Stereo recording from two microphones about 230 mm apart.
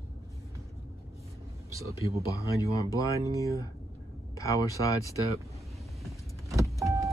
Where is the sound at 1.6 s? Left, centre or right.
Centre.